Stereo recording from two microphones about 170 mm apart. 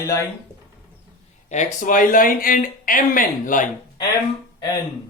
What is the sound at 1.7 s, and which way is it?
Speech, 50° left (ahead or behind).